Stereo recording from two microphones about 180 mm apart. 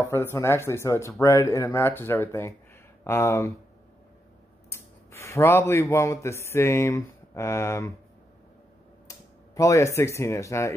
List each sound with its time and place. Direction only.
0.1 s speech: 15° left (ahead or behind)
4.6 s a man's voice: 15° left (ahead or behind)
9.6 s speech: 15° left (ahead or behind)